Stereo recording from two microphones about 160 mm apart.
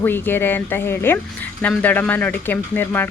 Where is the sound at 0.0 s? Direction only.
15° left (ahead or behind).